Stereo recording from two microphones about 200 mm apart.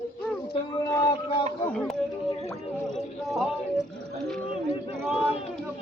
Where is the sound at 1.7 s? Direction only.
5° left (ahead or behind).